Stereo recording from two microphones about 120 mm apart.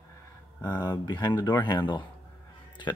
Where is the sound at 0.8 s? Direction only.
35° left (ahead or behind).